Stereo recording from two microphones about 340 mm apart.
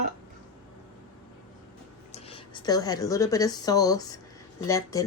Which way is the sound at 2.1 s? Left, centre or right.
Centre.